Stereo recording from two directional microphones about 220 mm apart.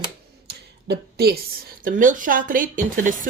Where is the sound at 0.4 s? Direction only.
45° right (ahead or behind).